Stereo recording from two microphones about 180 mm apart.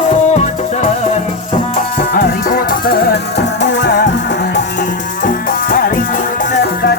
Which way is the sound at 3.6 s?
75° left (ahead or behind).